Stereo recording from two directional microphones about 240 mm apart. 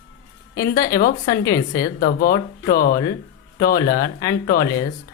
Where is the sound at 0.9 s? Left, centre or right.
Left.